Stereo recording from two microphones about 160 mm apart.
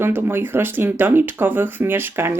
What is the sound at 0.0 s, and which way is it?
Speech, 15° right (ahead or behind).